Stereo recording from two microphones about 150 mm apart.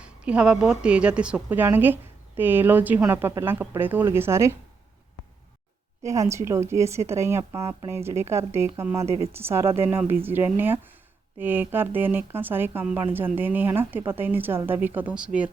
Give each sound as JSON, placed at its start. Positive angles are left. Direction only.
{"t": 0.0, "sound": "a woman's voice", "side_deg": -5}
{"t": 6.0, "sound": "a woman's voice", "side_deg": -20}